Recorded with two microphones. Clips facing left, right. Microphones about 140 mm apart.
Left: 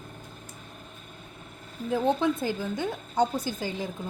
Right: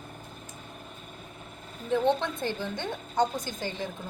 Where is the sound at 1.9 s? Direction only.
5° left (ahead or behind).